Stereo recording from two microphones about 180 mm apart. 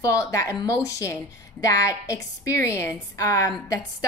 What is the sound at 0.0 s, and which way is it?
A woman's voice, 20° left (ahead or behind).